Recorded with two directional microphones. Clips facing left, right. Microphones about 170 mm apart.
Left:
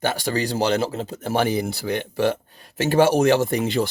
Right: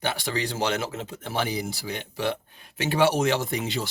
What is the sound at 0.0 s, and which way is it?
A man's voice, 45° left (ahead or behind).